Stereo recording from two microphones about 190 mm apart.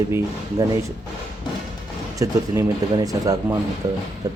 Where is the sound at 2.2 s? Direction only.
20° right (ahead or behind).